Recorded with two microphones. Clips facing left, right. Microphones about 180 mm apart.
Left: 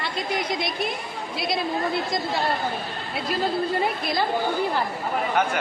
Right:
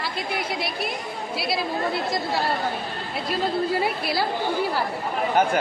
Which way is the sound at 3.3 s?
5° right (ahead or behind).